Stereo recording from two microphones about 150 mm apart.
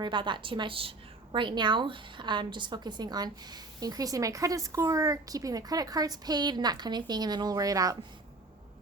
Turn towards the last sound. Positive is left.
turn(degrees=-25)  # may be behind; listen again after turning